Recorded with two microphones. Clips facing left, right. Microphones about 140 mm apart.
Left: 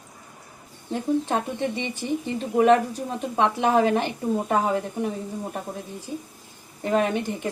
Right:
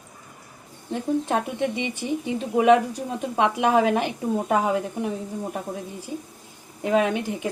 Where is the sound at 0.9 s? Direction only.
5° right (ahead or behind).